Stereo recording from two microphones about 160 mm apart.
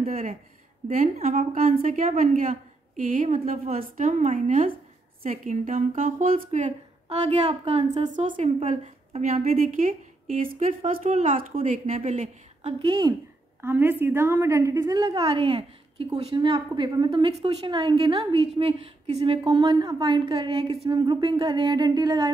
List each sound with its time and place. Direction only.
0.8 s a woman's voice: 55° right (ahead or behind)
1.1 s a woman's voice: 45° right (ahead or behind); by 6.3 s 60° right (ahead or behind)
6.5 s a woman's voice: 45° right (ahead or behind)
9.6 s a woman's voice: 60° right (ahead or behind)
12.8 s a woman's voice: 30° right (ahead or behind)
13.6 s a woman's voice: 15° right (ahead or behind)